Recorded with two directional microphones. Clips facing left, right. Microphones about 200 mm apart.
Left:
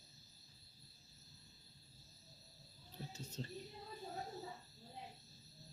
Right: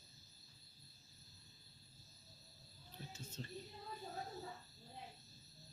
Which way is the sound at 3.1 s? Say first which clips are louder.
Left 3 dB; 35° left (ahead or behind).